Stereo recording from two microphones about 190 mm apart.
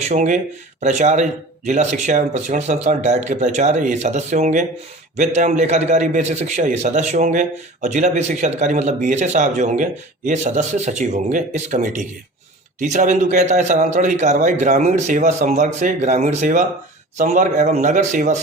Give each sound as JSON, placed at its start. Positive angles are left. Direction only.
{"t": 0.1, "sound": "a man's voice", "side_deg": -40}